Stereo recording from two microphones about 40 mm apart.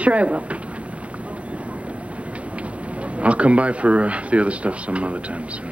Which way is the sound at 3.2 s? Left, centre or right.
Right.